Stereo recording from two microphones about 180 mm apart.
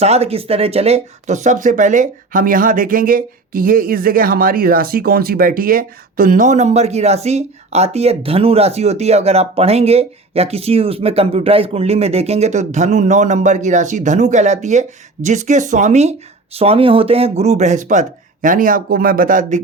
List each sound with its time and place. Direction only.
0.0 s speech: 35° right (ahead or behind)